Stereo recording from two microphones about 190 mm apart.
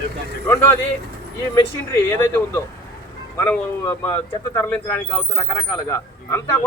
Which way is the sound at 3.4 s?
10° left (ahead or behind).